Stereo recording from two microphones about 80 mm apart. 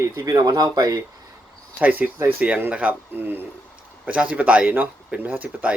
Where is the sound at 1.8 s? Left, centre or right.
Right.